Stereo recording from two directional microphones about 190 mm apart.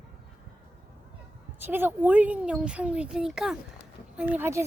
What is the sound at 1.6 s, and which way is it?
Speech, 10° right (ahead or behind).